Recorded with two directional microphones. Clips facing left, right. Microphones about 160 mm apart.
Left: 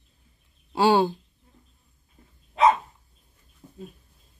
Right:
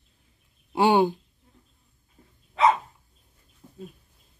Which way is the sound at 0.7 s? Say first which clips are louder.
Even; 20° right (ahead or behind).